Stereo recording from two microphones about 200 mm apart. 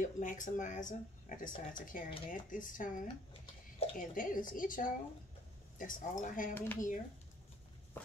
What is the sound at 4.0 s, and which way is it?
A woman's voice, 40° left (ahead or behind).